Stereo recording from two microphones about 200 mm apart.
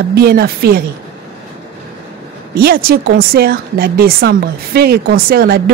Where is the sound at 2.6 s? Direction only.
50° right (ahead or behind).